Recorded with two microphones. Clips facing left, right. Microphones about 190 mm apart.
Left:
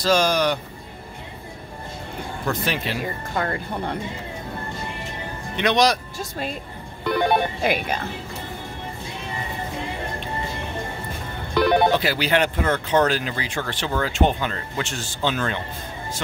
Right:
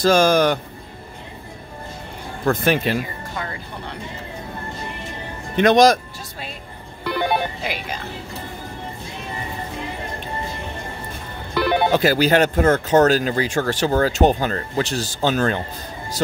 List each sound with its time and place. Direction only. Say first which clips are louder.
0.0 s speech: right 4 dB; 50° right (ahead or behind)
2.4 s speech: right 7 dB; 50° right (ahead or behind)
3.3 s speech: left 6 dB; 50° left (ahead or behind)
5.6 s speech: right 6 dB; 45° right (ahead or behind)
7.1 s speech: left 1 dB; centre (ahead or behind)
7.6 s speech: left 5 dB; 50° left (ahead or behind)
11.5 s telephone bell ringing: left 2 dB; 5° right (ahead or behind)
11.9 s speech: right 5 dB; 45° right (ahead or behind)